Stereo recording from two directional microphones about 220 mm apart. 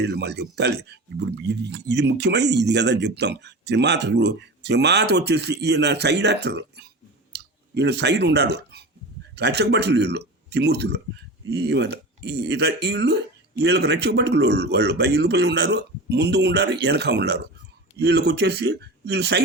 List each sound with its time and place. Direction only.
0.0 s speech: 50° right (ahead or behind)